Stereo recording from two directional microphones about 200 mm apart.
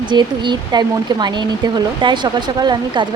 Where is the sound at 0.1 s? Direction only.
20° right (ahead or behind).